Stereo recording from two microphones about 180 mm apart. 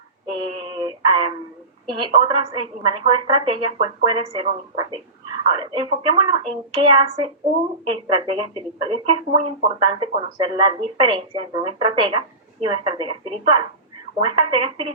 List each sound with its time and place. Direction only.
0.3 s female singing: 30° right (ahead or behind)
1.9 s speech: 30° right (ahead or behind)